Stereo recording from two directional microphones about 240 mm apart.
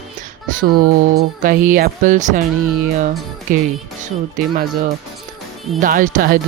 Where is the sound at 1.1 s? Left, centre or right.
Right.